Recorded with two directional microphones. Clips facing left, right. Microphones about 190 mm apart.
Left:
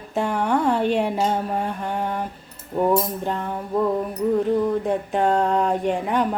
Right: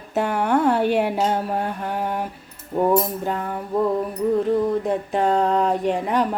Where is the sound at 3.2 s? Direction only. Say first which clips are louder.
Right 1 dB; 5° right (ahead or behind).